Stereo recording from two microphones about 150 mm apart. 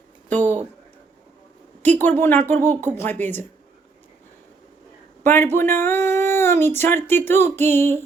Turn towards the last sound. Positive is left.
turn(degrees=15)  # may be behind; listen again after turning